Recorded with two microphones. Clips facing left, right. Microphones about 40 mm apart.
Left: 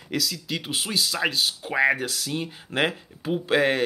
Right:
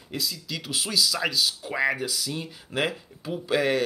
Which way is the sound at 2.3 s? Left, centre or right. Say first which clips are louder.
Left 6 dB; left.